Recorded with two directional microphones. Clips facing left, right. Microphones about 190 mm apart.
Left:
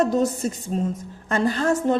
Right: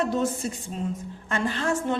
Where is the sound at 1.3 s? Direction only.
40° left (ahead or behind).